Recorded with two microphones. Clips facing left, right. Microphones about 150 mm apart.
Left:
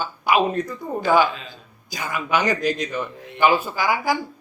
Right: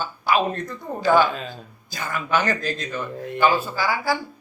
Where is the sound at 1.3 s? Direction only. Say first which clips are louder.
Right 5 dB; 45° right (ahead or behind).